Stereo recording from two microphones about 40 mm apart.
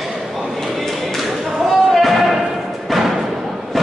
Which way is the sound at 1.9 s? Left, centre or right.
Centre.